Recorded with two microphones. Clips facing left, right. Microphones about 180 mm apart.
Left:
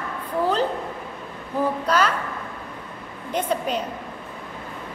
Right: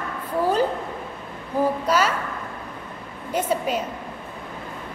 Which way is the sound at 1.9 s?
10° right (ahead or behind).